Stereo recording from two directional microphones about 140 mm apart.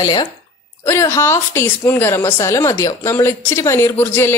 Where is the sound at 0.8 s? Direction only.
20° left (ahead or behind).